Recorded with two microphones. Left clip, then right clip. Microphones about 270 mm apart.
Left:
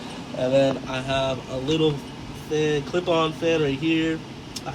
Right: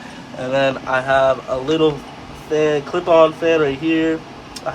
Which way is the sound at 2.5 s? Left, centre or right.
Centre.